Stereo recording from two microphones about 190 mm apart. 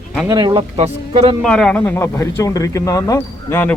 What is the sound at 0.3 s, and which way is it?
Speech, 20° right (ahead or behind).